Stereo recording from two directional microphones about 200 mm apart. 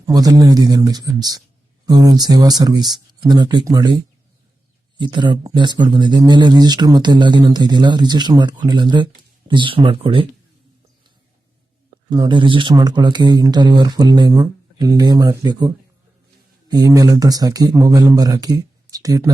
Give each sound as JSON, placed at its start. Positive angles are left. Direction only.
{"t": 0.1, "sound": "speech", "side_deg": -20}
{"t": 4.9, "sound": "speech", "side_deg": -20}
{"t": 12.0, "sound": "speech", "side_deg": -20}